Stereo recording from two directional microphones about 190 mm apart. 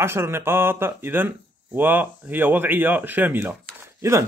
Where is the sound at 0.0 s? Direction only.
15° right (ahead or behind).